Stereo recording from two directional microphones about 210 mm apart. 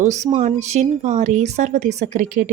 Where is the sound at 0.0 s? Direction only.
35° right (ahead or behind).